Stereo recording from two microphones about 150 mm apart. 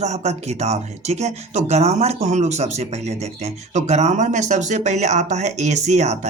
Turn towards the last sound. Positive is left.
turn(degrees=-50)  # may be behind; listen again after turning